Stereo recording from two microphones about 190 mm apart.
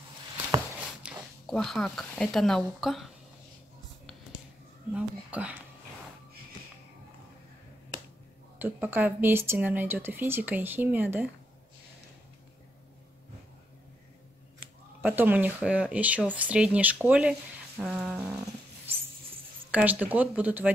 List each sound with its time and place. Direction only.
1.0 s speech: 5° right (ahead or behind)
4.9 s speech: 5° right (ahead or behind)
8.5 s speech: 10° right (ahead or behind)
15.0 s speech: 10° right (ahead or behind)
19.7 s speech: 10° right (ahead or behind)